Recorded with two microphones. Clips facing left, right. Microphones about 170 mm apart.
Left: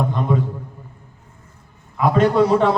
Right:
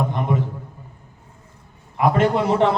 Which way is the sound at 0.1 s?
15° right (ahead or behind).